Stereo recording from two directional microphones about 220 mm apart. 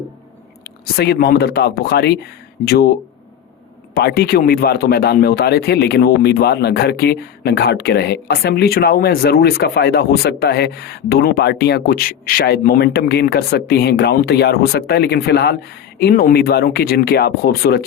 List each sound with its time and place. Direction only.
0.6 s a man's voice: 45° left (ahead or behind)
3.9 s a man's voice: 45° left (ahead or behind)